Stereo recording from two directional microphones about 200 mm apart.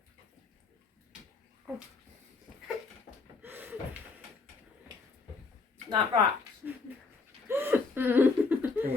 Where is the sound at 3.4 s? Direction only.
10° right (ahead or behind).